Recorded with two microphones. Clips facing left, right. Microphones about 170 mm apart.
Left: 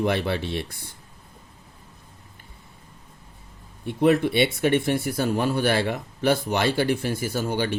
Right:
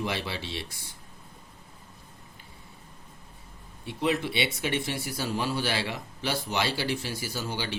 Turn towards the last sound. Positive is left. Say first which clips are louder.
# left 8 dB
turn(degrees=50)  # may be behind; listen again after turning